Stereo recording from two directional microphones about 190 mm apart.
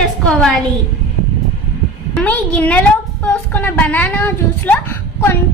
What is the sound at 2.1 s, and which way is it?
A woman's voice, 5° left (ahead or behind).